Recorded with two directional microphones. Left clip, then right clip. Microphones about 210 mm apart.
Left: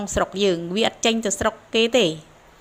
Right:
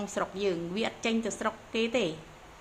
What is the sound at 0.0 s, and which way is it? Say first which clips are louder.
A woman's voice: left 10 dB; 30° left (ahead or behind).